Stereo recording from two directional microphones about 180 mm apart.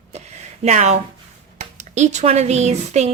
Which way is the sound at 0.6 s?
40° right (ahead or behind).